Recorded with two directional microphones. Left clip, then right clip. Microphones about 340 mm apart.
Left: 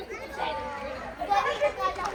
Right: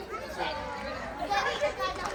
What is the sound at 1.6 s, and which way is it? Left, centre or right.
Children playing, centre.